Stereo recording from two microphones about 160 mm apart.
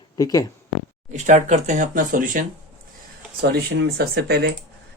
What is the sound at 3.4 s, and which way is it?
Speech, 90° right.